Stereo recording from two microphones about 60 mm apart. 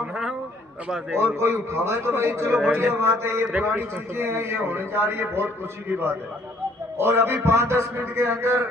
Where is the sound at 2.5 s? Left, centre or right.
Centre.